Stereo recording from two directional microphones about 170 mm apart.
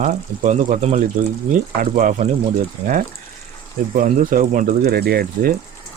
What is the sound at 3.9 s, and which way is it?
Speech, 55° right (ahead or behind).